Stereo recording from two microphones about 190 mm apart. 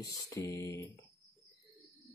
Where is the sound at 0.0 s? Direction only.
15° left (ahead or behind).